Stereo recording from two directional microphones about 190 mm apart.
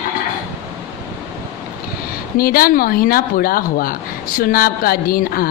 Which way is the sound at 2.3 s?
50° left (ahead or behind).